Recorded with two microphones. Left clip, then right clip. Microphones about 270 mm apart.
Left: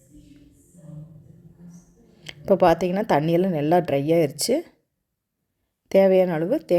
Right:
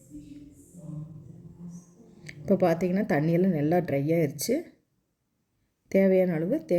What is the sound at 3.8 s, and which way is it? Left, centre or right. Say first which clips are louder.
Speech: left 8 dB; left.